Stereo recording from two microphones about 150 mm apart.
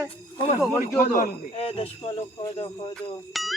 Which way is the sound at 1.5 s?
40° left (ahead or behind).